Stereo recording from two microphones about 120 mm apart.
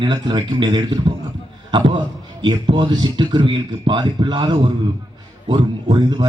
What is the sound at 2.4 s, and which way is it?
A man's voice, 40° right (ahead or behind).